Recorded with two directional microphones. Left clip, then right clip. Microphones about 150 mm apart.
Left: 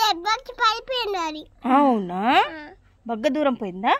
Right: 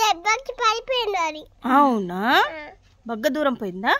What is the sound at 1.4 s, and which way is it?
Speech, 50° right (ahead or behind).